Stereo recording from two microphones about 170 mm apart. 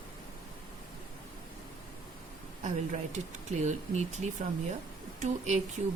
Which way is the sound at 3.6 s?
45° right (ahead or behind).